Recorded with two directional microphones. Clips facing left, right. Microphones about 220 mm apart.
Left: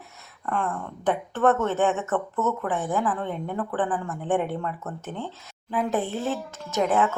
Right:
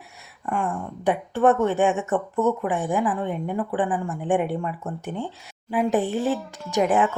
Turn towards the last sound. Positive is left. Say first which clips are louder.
# right 2 dB
turn(degrees=-15)  # may be behind; listen again after turning